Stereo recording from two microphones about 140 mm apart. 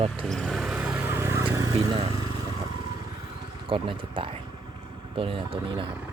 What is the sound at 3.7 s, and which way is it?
Speech, 40° right (ahead or behind).